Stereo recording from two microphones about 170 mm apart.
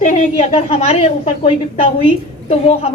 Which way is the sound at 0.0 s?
45° left (ahead or behind).